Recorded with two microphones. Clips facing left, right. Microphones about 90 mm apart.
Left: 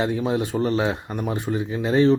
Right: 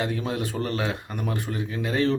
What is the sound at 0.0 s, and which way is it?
Speech, 20° left (ahead or behind).